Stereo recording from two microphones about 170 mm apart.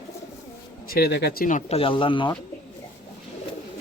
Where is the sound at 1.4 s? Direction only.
50° left (ahead or behind).